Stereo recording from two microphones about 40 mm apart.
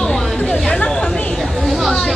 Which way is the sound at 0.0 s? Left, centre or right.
Centre.